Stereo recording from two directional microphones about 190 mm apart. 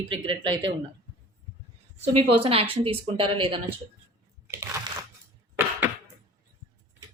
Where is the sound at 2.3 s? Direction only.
30° right (ahead or behind).